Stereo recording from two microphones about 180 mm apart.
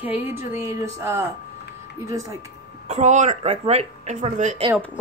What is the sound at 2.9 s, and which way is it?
Speech, 40° right (ahead or behind).